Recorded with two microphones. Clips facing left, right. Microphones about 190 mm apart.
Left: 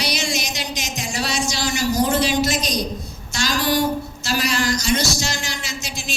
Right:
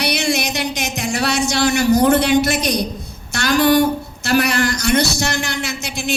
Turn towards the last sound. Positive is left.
turn(degrees=-60)  # may be behind; listen again after turning